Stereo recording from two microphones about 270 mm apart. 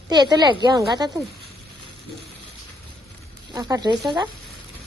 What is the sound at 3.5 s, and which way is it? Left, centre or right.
Speech, centre.